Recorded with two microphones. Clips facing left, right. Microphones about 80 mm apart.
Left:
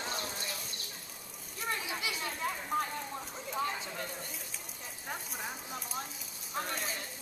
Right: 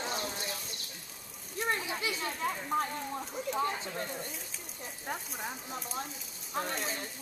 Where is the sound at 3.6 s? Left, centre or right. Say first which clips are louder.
Right 3 dB; right.